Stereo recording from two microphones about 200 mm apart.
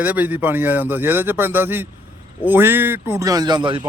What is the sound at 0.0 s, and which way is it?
Speech, 10° right (ahead or behind).